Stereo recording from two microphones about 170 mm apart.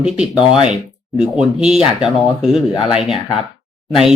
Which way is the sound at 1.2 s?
5° right (ahead or behind).